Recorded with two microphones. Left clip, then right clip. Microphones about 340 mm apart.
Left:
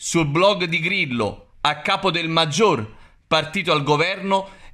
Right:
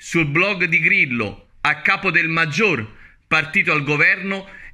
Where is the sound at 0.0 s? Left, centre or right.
Centre.